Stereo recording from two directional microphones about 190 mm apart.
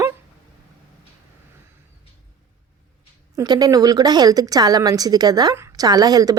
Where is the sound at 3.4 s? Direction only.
20° right (ahead or behind).